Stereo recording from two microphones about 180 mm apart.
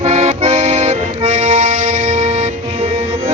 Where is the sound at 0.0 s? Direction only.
35° right (ahead or behind).